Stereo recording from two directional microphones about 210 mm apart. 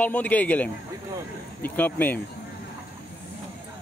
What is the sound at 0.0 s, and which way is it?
Speech, 5° left (ahead or behind).